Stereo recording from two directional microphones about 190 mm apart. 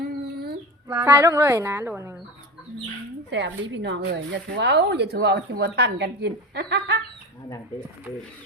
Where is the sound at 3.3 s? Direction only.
70° right (ahead or behind).